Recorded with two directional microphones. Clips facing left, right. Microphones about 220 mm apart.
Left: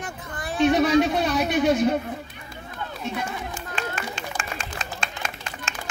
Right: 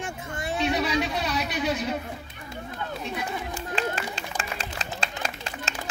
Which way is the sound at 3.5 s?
35° right (ahead or behind).